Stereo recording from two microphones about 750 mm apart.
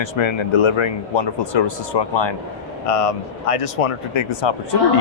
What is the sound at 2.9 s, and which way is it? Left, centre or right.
Speech, left.